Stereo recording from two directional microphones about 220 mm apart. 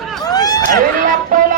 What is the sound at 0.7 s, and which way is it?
Music, 40° right (ahead or behind).